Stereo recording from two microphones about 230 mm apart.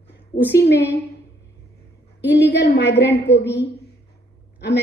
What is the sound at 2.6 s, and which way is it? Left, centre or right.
Speech, left.